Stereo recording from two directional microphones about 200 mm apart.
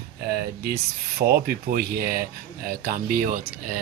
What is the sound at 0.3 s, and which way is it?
Speech, 50° right (ahead or behind).